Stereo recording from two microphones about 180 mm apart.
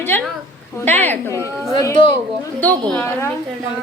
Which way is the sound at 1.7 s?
30° left (ahead or behind).